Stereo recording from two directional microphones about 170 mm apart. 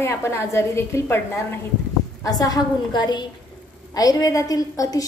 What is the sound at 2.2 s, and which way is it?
A woman's voice, 20° left (ahead or behind).